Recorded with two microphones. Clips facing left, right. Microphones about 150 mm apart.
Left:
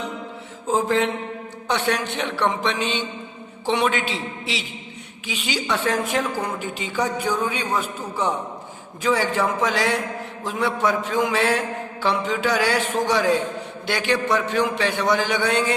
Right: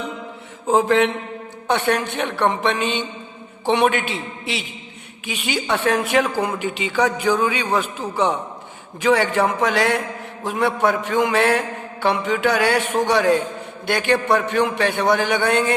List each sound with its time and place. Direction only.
0.7 s a man's voice: 65° right (ahead or behind)
1.6 s a man's voice: 55° right (ahead or behind); by 8.3 s 85° right
9.0 s a man's voice: 65° right (ahead or behind)